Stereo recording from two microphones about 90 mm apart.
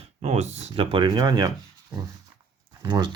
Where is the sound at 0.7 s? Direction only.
65° right (ahead or behind); by 1.5 s 50° right (ahead or behind).